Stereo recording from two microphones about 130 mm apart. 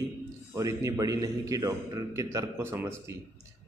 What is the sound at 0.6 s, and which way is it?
A man's voice, 25° right (ahead or behind).